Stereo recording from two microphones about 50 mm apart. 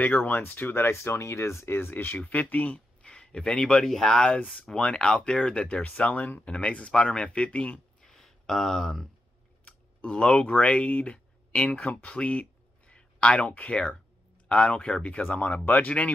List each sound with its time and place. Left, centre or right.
0.0 s speech: left
2.1 s speech: left
6.4 s speech: left
8.0 s a sound: centre
9.7 s speech: centre
11.9 s speech: left
12.2 s speech: left